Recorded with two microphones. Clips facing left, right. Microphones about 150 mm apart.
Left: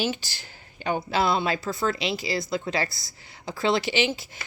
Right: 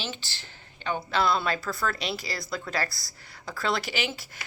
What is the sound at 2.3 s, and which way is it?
Speech, 25° left (ahead or behind).